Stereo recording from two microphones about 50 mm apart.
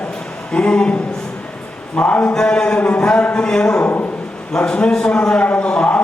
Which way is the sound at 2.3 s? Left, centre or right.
Centre.